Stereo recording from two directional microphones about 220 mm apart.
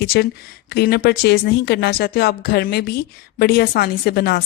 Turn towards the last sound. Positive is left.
turn(degrees=45)  # may be behind; listen again after turning